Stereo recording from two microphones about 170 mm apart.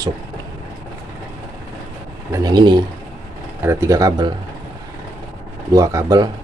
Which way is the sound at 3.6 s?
15° right (ahead or behind).